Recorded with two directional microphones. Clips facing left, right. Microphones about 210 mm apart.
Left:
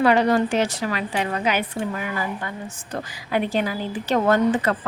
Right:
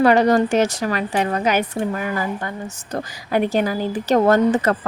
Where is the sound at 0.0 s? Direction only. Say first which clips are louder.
Right 3 dB; 45° right (ahead or behind).